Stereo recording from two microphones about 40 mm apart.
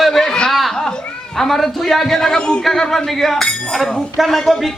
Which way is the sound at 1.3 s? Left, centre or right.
Centre.